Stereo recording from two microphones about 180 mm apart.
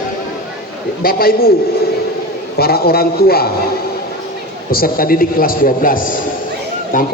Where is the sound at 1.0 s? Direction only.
55° left (ahead or behind).